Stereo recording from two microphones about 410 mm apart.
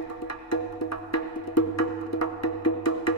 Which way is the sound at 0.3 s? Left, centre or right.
Left.